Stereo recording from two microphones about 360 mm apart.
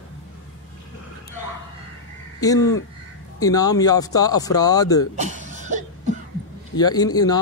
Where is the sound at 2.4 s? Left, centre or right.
Centre.